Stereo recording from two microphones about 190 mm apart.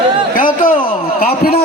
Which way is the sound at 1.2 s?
50° left (ahead or behind).